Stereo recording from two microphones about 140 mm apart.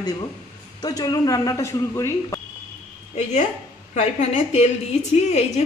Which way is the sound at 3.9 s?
50° left (ahead or behind).